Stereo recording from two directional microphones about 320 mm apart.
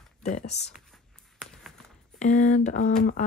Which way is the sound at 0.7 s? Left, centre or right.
Centre.